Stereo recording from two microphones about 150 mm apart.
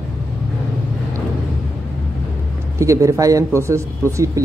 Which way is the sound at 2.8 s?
20° right (ahead or behind).